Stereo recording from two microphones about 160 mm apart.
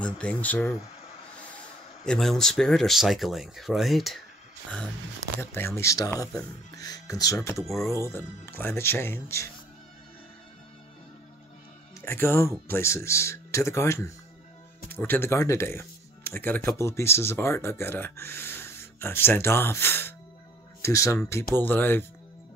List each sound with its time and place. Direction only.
0.0 s speech: 5° left (ahead or behind)
2.0 s speech: 5° left (ahead or behind)
5.4 s speech: 15° left (ahead or behind)
7.5 s speech: centre (ahead or behind)
8.0 s speech: 15° left (ahead or behind)
12.0 s speech: 15° left (ahead or behind)